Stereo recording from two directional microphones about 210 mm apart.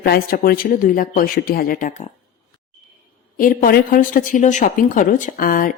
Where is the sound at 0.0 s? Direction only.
45° left (ahead or behind).